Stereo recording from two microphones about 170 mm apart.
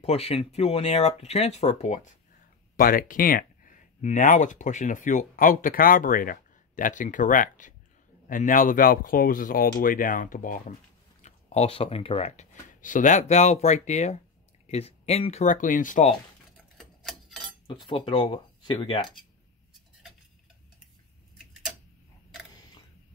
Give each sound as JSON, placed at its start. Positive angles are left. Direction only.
{"t": 0.0, "sound": "speech", "side_deg": 35}
{"t": 2.8, "sound": "speech", "side_deg": 55}
{"t": 11.2, "sound": "speech", "side_deg": 40}
{"t": 16.7, "sound": "clock", "side_deg": 0}
{"t": 17.6, "sound": "speech", "side_deg": 30}